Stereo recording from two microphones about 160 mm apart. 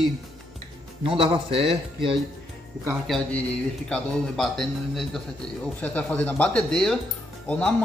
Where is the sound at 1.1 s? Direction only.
35° right (ahead or behind).